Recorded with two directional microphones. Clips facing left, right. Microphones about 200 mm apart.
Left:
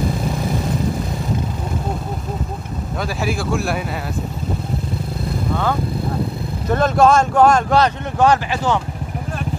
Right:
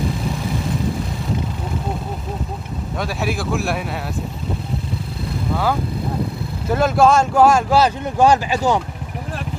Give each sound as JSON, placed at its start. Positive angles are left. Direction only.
{"t": 3.0, "sound": "speech", "side_deg": 0}
{"t": 6.7, "sound": "speech", "side_deg": -5}